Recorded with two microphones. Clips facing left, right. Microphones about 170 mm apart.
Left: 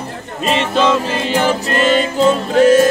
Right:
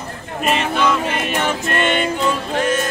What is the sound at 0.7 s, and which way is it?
Music, 30° left (ahead or behind).